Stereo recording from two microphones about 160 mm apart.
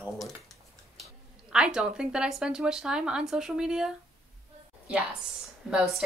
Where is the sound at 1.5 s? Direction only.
5° right (ahead or behind).